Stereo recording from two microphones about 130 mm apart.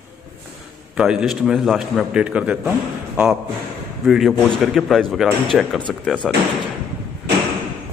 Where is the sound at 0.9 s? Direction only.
5° right (ahead or behind).